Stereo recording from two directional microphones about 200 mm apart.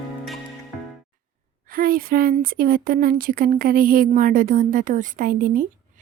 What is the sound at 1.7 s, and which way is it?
A woman's voice, 45° right (ahead or behind).